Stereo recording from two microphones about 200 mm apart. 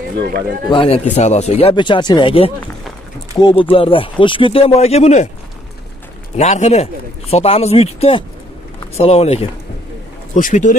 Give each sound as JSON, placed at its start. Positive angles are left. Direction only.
{"t": 0.2, "sound": "a man's voice", "side_deg": -50}
{"t": 0.7, "sound": "speech", "side_deg": 25}
{"t": 6.3, "sound": "speech", "side_deg": 35}